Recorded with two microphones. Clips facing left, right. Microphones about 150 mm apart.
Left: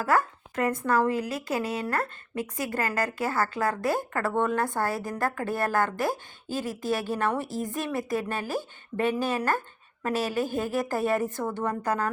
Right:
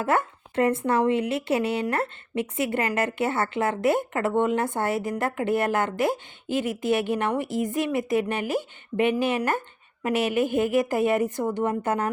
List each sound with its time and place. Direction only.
0.0 s a woman's voice: 25° right (ahead or behind)